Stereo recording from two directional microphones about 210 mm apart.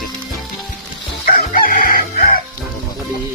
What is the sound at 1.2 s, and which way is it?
Crowing, 45° left (ahead or behind).